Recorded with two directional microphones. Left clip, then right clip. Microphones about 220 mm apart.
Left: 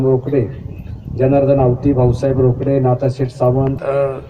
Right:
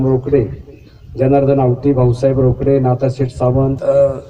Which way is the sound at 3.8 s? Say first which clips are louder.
Right 8 dB; 50° right (ahead or behind).